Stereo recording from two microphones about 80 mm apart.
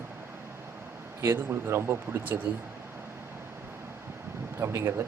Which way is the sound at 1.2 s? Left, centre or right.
Right.